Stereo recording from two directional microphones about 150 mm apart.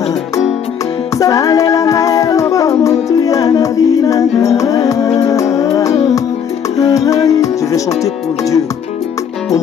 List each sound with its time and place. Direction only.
1.1 s music: 20° left (ahead or behind)